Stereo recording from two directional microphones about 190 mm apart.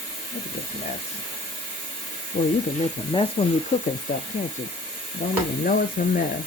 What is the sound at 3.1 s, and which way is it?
Speech, 25° left (ahead or behind).